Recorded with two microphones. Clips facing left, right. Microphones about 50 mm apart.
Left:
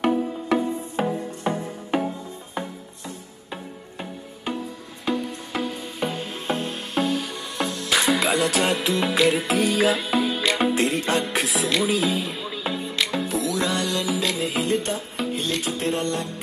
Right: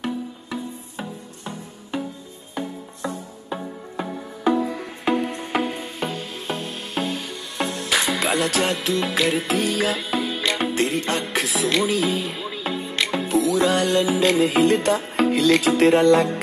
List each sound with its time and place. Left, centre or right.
0.0 s music: left
5.0 s music: right
6.1 s music: left
7.0 s music: centre
13.1 s music: centre
13.7 s music: right
14.8 s music: right